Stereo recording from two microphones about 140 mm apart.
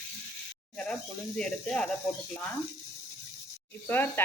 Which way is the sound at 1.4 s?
5° left (ahead or behind).